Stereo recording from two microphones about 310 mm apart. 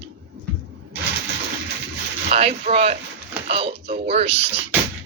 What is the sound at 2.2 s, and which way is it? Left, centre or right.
Speech, centre.